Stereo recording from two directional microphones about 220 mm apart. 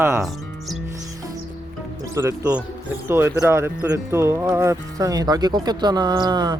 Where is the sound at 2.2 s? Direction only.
10° right (ahead or behind).